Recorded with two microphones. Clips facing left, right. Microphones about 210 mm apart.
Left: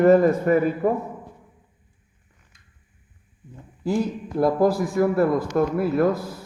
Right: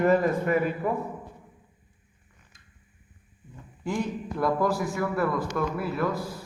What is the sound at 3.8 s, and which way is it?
Speech, 35° left (ahead or behind).